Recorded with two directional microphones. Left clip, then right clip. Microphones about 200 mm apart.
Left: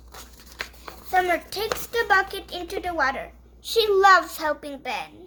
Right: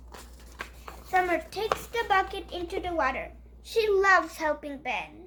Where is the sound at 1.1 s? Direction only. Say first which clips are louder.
Left 4 dB; 40° left (ahead or behind).